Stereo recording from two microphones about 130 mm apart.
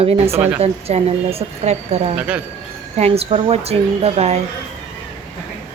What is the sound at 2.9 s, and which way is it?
Speech, 50° right (ahead or behind).